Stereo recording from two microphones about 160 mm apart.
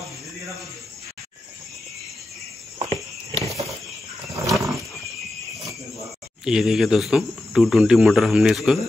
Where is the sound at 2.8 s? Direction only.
30° right (ahead or behind).